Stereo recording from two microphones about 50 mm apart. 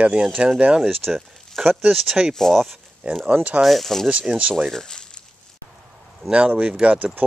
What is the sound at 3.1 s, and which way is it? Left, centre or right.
Speech, right.